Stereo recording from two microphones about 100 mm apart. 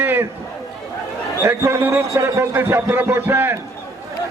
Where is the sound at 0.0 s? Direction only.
20° right (ahead or behind).